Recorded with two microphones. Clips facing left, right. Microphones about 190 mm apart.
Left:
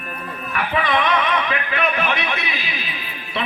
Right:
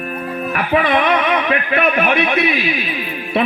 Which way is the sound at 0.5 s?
55° right (ahead or behind).